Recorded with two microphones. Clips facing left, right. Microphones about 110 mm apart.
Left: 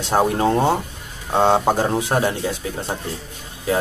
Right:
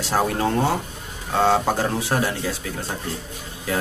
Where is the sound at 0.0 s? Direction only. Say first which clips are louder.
Left 4 dB; 20° left (ahead or behind).